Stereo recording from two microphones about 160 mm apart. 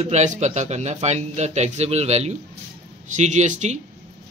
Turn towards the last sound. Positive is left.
turn(degrees=-45)  # may be behind; listen again after turning